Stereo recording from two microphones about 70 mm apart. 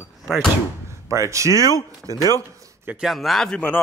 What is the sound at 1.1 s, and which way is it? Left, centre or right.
Speech, right.